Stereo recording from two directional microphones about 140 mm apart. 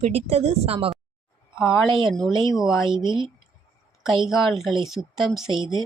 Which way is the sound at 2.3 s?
35° right (ahead or behind).